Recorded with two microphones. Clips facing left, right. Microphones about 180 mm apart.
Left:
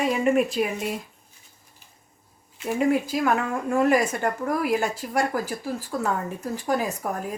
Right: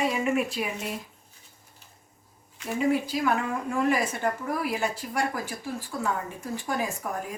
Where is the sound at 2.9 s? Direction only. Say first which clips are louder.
Left 2 dB; 45° left (ahead or behind).